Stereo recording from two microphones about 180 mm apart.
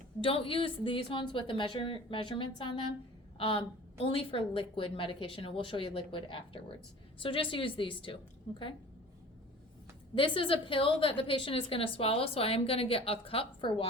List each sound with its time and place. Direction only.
0.2 s a woman's voice: 30° left (ahead or behind)
10.2 s a woman's voice: 30° left (ahead or behind)